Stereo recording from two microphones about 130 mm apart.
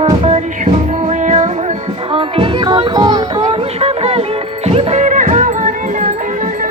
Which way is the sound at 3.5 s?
50° right (ahead or behind).